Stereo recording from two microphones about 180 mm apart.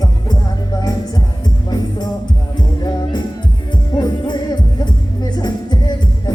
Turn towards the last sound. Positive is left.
turn(degrees=20)  # may be behind; listen again after turning